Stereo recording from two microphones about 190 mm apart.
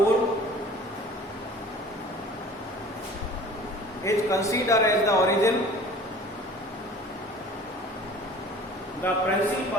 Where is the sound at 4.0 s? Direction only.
15° left (ahead or behind).